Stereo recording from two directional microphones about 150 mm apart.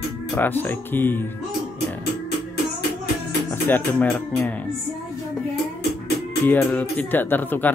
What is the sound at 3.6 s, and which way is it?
Speech, 15° left (ahead or behind).